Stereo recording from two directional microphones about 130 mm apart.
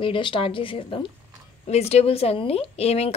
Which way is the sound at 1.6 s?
55° left (ahead or behind).